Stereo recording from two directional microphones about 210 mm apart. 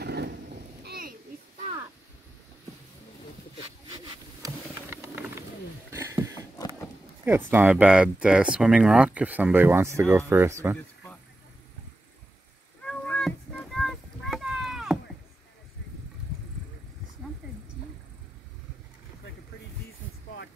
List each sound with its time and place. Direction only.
0.0 s a sound: 50° right (ahead or behind)
0.8 s rain: 45° right (ahead or behind)
4.9 s bird: 10° right (ahead or behind)
5.9 s a sound: 15° right (ahead or behind)
7.5 s speech: 5° right (ahead or behind)
12.8 s boat: 5° left (ahead or behind)
17.4 s wild animals: 5° right (ahead or behind)